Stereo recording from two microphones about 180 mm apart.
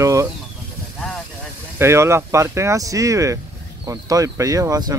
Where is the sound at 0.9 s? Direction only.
5° left (ahead or behind).